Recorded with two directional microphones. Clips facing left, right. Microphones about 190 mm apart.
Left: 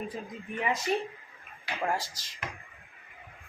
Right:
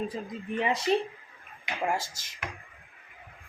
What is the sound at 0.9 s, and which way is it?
Speech, 25° right (ahead or behind).